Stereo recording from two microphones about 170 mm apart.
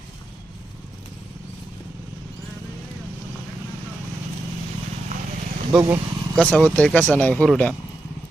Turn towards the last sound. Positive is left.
turn(degrees=5)  # may be behind; listen again after turning